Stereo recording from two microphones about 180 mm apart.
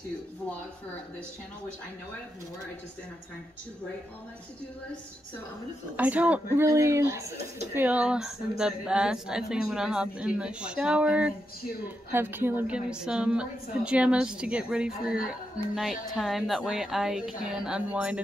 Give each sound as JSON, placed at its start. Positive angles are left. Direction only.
{"t": 5.9, "sound": "a woman's voice", "side_deg": -10}